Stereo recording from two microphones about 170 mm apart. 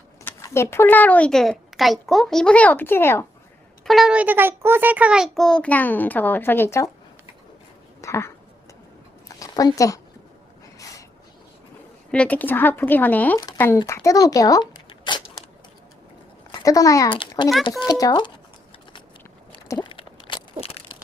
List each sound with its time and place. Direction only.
0.3 s speech: 15° left (ahead or behind)
3.8 s a child's voice: centre (ahead or behind); by 6.9 s 15° left (ahead or behind)
8.0 s a sound: 15° left (ahead or behind)
9.4 s speech: 20° left (ahead or behind)
10.8 s a sound: 20° left (ahead or behind)
12.1 s speech: 10° left (ahead or behind); by 15.2 s 25° left (ahead or behind)
16.5 s speech: 20° left (ahead or behind)
19.6 s a sound: 20° left (ahead or behind)
19.9 s crushing: 30° left (ahead or behind)